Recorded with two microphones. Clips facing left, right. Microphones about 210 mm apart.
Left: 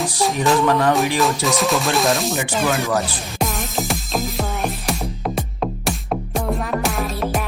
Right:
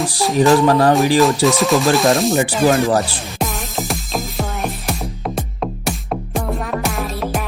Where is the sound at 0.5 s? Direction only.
35° right (ahead or behind).